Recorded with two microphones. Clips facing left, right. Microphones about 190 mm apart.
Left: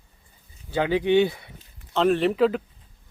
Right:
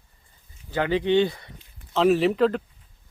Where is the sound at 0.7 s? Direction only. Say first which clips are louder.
Left 1 dB; 10° left (ahead or behind).